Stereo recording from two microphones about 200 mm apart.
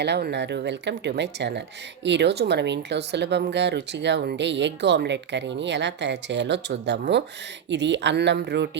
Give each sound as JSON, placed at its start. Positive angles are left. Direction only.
{"t": 0.0, "sound": "speech", "side_deg": -55}